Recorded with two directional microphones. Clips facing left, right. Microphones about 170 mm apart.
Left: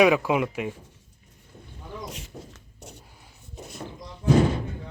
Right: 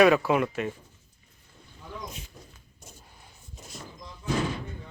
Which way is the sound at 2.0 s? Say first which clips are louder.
Left 5 dB; 85° left.